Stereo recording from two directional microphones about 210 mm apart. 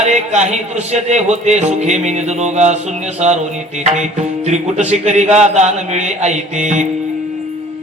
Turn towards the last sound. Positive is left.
turn(degrees=-35)  # may be behind; listen again after turning